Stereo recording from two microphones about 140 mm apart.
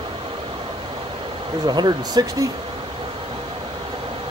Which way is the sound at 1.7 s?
30° right (ahead or behind).